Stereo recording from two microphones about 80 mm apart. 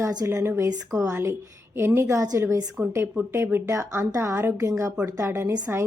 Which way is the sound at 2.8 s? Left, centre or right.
Right.